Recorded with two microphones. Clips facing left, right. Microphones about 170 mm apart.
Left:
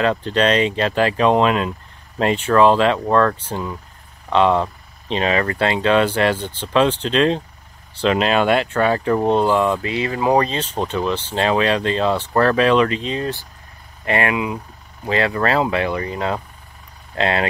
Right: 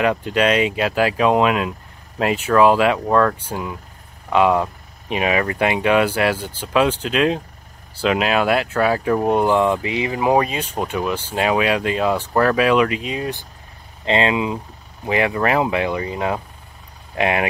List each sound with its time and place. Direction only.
0.0 s speech: 10° right (ahead or behind)